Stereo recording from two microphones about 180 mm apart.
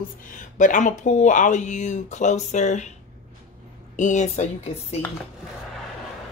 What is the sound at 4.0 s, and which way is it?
Speech, 40° left (ahead or behind).